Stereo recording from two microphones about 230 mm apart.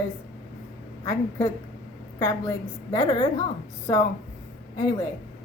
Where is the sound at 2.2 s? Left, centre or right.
Centre.